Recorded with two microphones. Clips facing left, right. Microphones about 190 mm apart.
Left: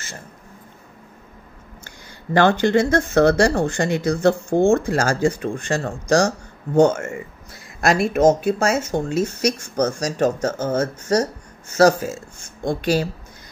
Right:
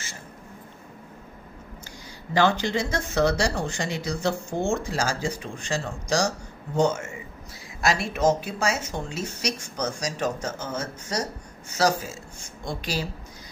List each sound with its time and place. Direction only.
1.9 s speech: 55° left (ahead or behind)